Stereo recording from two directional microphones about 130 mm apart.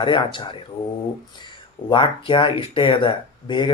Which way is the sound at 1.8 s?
40° left (ahead or behind).